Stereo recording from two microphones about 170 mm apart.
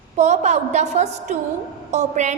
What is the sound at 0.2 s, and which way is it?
A woman's voice, 40° right (ahead or behind).